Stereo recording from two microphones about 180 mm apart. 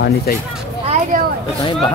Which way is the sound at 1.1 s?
45° right (ahead or behind).